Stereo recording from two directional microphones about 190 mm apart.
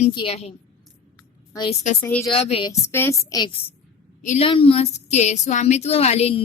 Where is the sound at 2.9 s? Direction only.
15° left (ahead or behind).